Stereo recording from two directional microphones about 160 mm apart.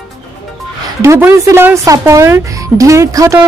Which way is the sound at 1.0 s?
15° right (ahead or behind).